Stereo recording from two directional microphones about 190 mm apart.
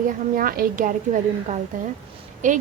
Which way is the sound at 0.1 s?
50° right (ahead or behind).